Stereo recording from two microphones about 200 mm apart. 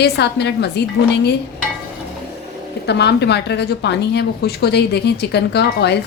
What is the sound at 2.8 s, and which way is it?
A woman's voice, 55° left (ahead or behind).